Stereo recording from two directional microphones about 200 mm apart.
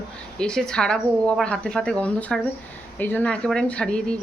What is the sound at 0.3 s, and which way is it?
Speech, 5° left (ahead or behind).